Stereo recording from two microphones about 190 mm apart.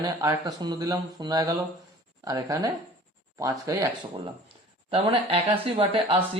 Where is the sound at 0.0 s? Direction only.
20° right (ahead or behind).